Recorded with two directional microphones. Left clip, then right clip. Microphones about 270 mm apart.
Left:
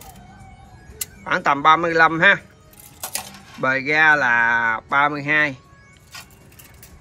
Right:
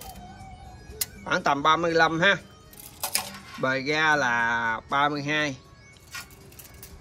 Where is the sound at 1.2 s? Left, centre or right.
Centre.